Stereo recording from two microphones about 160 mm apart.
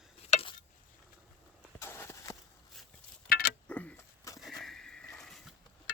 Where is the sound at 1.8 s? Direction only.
15° left (ahead or behind).